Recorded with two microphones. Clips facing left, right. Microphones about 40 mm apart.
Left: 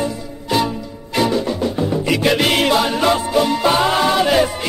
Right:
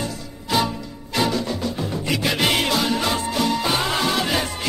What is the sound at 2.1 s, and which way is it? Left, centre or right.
Music, centre.